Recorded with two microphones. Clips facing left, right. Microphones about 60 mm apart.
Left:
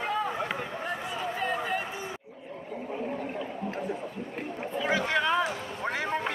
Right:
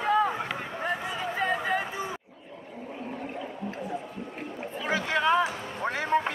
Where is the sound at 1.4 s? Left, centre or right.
Right.